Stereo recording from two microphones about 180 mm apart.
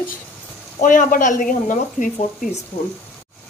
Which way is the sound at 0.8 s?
45° left (ahead or behind).